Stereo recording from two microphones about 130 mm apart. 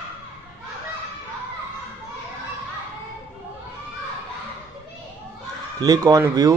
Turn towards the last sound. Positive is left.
turn(degrees=-25)  # may be behind; listen again after turning